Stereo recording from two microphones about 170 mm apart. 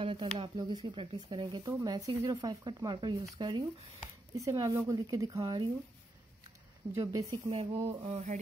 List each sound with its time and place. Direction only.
0.0 s speech: 30° right (ahead or behind)
6.9 s speech: 20° right (ahead or behind)
7.4 s speech: 35° right (ahead or behind)